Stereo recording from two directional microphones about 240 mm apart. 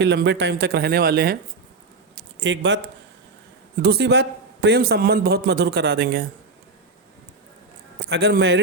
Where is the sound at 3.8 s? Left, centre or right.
Right.